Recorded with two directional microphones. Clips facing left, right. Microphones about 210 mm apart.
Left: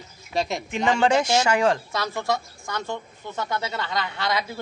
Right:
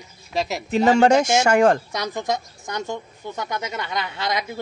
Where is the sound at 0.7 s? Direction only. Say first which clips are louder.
Right 6 dB; 40° right (ahead or behind).